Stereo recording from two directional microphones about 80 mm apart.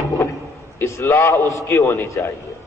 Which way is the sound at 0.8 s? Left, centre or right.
Left.